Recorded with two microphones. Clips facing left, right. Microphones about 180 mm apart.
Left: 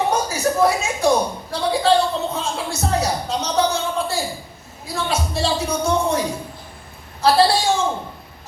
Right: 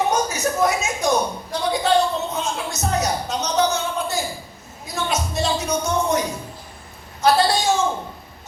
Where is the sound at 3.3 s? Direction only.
30° left (ahead or behind).